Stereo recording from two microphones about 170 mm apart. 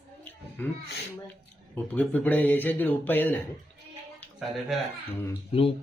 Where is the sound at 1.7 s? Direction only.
10° left (ahead or behind).